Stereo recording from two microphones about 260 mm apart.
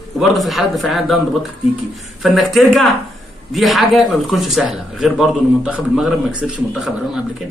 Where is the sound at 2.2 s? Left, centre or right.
Centre.